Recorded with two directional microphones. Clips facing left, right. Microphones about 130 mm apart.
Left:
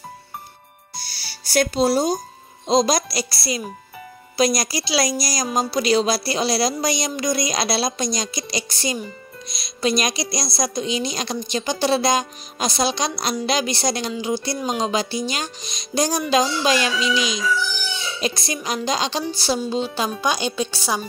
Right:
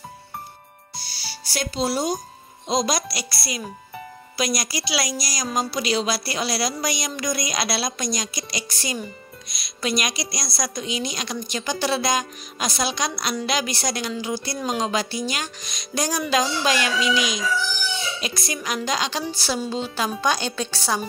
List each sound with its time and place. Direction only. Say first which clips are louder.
1.0 s music: right 2 dB; 50° left (ahead or behind)
2.7 s a woman's voice: left 5 dB; 30° left (ahead or behind); by 21.0 s 15° left (ahead or behind)